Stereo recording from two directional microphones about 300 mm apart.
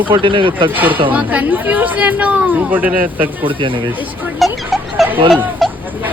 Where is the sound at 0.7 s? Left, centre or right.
Centre.